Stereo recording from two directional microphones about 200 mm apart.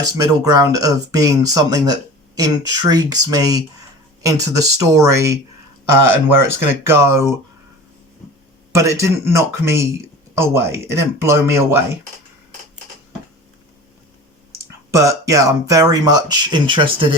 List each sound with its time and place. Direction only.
0.0 s speech: 20° right (ahead or behind)
6.4 s speech: 10° right (ahead or behind)
8.7 s speech: 15° right (ahead or behind)
14.8 s speech: 15° right (ahead or behind)